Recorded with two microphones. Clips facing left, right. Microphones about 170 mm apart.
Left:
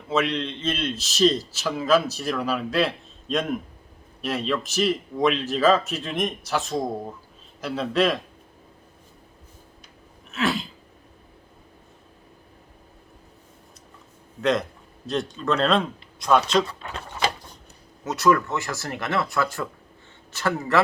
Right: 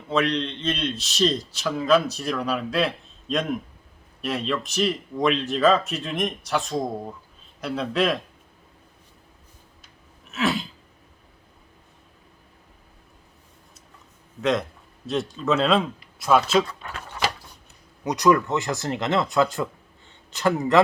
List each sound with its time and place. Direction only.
0.1 s a man's voice: centre (ahead or behind)
10.3 s throat clearing: centre (ahead or behind)
14.4 s a man's voice: centre (ahead or behind)
18.0 s speech: 15° right (ahead or behind)